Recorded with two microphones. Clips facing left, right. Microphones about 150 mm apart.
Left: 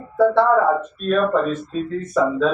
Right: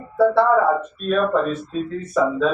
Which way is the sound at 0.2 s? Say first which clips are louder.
Even; 5° right (ahead or behind).